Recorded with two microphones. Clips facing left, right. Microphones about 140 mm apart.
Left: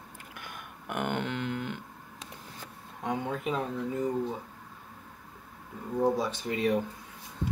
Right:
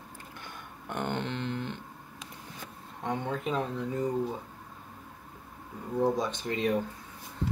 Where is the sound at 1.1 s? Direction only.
25° right (ahead or behind).